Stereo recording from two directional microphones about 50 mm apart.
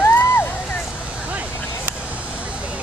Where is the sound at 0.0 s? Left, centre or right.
Left.